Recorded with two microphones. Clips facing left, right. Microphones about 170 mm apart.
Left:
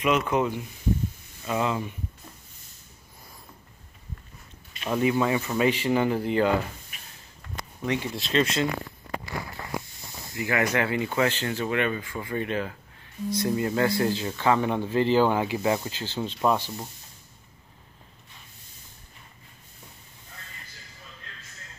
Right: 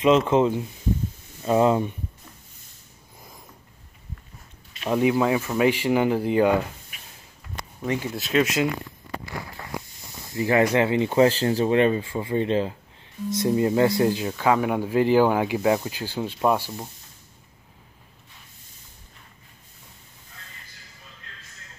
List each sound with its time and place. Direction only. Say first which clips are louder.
0.0 s speech: right 6 dB; 25° right (ahead or behind)
1.4 s speech: right 8 dB; 35° right (ahead or behind)
4.8 s speech: right 3 dB; 10° right (ahead or behind)
8.2 s speech: right 4 dB; 5° right (ahead or behind)
10.3 s speech: right 6 dB; 25° right (ahead or behind); by 16.9 s 10° right (ahead or behind)